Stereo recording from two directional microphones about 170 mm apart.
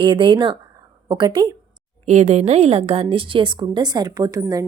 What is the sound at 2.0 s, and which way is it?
A woman's voice, 40° right (ahead or behind).